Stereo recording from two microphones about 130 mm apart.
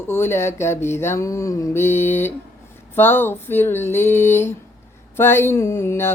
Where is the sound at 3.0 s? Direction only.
15° left (ahead or behind).